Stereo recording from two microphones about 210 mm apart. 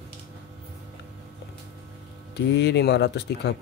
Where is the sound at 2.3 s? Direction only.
55° left (ahead or behind).